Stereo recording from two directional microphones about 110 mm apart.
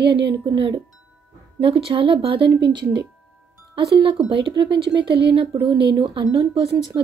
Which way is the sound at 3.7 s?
50° right (ahead or behind).